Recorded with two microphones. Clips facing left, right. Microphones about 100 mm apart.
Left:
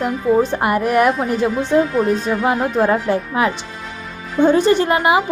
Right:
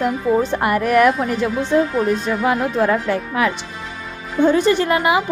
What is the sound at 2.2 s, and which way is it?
A woman's voice, 25° left (ahead or behind).